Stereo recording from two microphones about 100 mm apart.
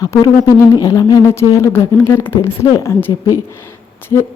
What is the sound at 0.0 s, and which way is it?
A woman's voice, 35° left (ahead or behind).